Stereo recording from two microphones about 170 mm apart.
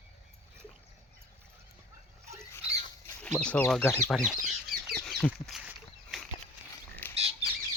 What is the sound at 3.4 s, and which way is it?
Speech, 5° left (ahead or behind).